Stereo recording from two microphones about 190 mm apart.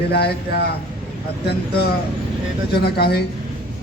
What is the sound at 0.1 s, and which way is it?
Speech, 55° left (ahead or behind).